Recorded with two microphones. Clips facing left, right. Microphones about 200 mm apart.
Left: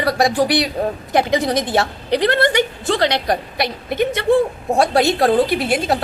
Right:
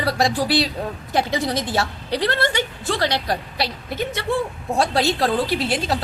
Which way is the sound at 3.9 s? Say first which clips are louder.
Left 10 dB; 60° left (ahead or behind).